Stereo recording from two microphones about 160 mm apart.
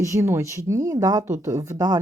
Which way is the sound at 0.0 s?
20° right (ahead or behind).